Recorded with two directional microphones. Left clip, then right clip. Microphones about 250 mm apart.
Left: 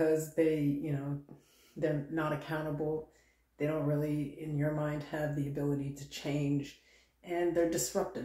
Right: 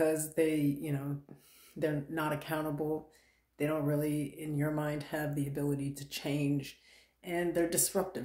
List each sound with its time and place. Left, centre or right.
0.0 s speech: right